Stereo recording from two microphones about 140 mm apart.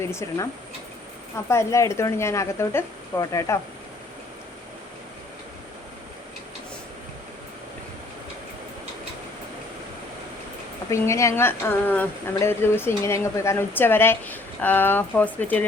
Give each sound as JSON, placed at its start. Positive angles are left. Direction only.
{"t": 0.0, "sound": "speech", "side_deg": 20}
{"t": 1.5, "sound": "speech", "side_deg": 20}
{"t": 10.8, "sound": "a woman's voice", "side_deg": 20}